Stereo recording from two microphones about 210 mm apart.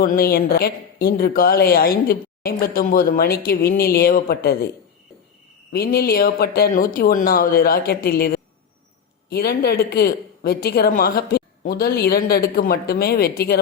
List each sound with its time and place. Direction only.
0.0 s a woman's voice: 45° left (ahead or behind)
5.7 s a woman's voice: 45° left (ahead or behind)